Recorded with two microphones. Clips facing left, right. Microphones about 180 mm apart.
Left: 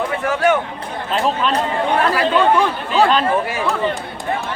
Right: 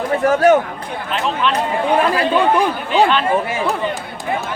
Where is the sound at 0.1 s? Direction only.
40° right (ahead or behind).